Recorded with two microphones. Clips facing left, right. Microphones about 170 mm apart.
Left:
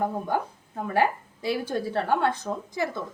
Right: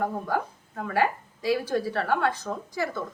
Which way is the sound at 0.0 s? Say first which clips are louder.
Left 1 dB; 20° left (ahead or behind).